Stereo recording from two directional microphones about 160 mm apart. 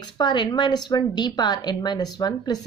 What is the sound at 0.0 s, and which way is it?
A woman's voice, 25° left (ahead or behind).